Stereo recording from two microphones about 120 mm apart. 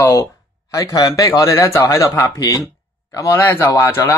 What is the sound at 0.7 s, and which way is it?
Speech, 30° left (ahead or behind).